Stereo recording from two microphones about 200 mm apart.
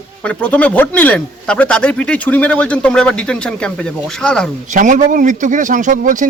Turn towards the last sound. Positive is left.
turn(degrees=-40)  # may be behind; listen again after turning